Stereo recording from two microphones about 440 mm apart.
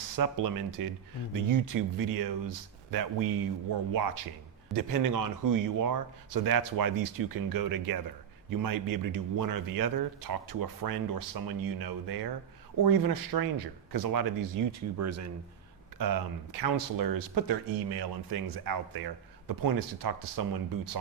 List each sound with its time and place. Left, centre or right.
0.2 s speech: right
16.0 s speech: right